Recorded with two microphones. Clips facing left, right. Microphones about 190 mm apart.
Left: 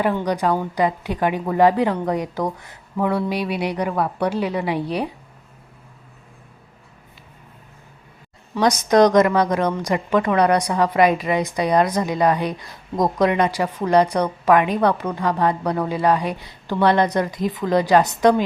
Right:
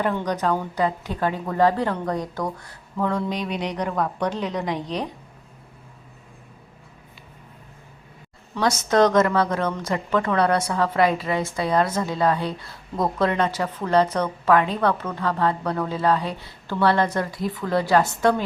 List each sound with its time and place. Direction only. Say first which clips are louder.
0.0 s a woman's voice: left 3 dB; 10° left (ahead or behind)
8.5 s a woman's voice: left 4 dB; 15° left (ahead or behind)